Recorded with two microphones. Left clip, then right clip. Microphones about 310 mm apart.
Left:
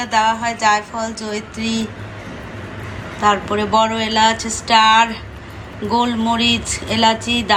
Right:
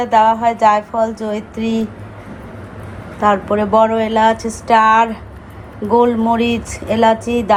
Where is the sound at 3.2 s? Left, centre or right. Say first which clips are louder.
Right 2 dB; centre.